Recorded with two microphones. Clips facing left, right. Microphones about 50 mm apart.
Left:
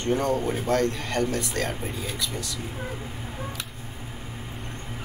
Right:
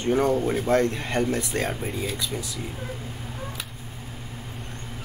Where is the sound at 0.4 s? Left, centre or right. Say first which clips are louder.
Right 3 dB; centre.